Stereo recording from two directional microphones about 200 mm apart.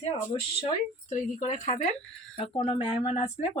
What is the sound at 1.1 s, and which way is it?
Speech, 40° left (ahead or behind).